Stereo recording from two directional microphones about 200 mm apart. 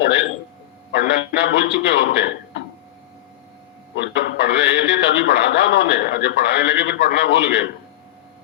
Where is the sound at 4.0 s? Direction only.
60° left (ahead or behind).